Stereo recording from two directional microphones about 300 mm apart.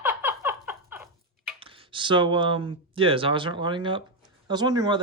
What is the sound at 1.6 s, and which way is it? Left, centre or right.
Speech, centre.